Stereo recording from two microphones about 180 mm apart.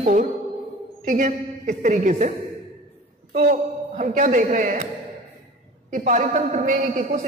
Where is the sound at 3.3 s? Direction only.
45° right (ahead or behind).